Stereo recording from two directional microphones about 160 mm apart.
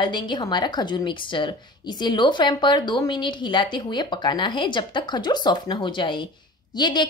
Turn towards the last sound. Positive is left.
turn(degrees=25)  # may be behind; listen again after turning